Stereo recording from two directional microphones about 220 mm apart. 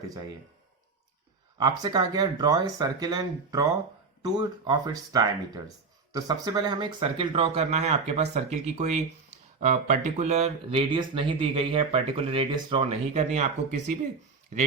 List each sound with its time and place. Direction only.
1.5 s speech: 20° right (ahead or behind)